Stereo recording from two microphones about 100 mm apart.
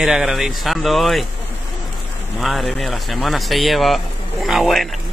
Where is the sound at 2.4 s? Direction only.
Centre (ahead or behind).